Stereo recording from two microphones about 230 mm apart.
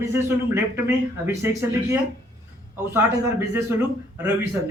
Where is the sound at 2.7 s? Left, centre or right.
Centre.